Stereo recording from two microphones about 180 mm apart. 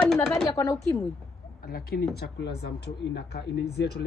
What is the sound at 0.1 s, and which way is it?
Speech, centre (ahead or behind).